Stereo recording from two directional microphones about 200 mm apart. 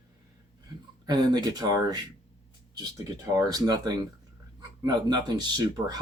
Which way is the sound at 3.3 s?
20° right (ahead or behind).